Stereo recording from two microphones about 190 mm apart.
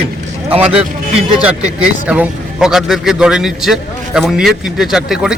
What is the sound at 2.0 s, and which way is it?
A man's voice, 5° right (ahead or behind).